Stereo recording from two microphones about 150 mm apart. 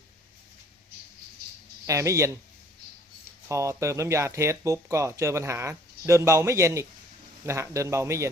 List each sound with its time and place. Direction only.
1.9 s speech: 20° right (ahead or behind)
3.5 s speech: 20° right (ahead or behind)